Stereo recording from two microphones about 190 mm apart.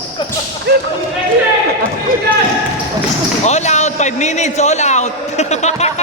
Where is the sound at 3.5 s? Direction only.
35° left (ahead or behind).